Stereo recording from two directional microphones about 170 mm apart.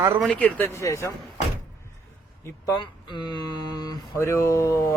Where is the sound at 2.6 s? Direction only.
30° left (ahead or behind).